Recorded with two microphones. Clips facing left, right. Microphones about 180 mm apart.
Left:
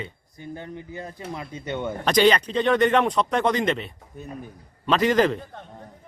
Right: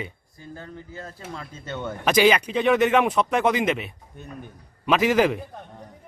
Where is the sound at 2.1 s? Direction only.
5° right (ahead or behind).